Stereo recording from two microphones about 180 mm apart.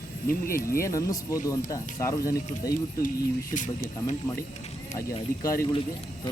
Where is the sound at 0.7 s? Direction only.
15° left (ahead or behind).